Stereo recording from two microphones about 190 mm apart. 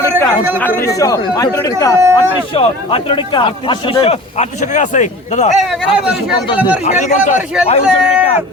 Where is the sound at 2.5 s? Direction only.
30° left (ahead or behind).